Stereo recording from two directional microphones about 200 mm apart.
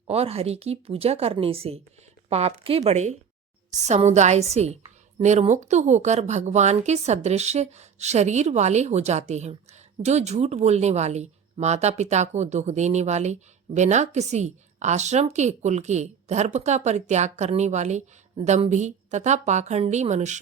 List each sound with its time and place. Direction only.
0.1 s a woman's voice: 30° right (ahead or behind)